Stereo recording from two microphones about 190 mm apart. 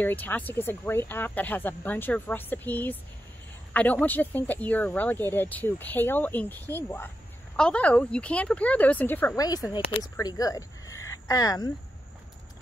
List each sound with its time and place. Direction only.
0.0 s speech: 10° left (ahead or behind)